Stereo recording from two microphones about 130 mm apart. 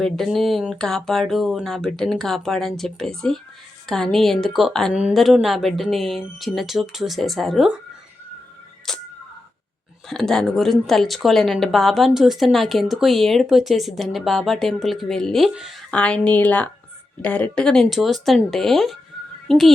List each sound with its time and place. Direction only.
0.0 s speech: centre (ahead or behind)
10.1 s speech: 5° left (ahead or behind)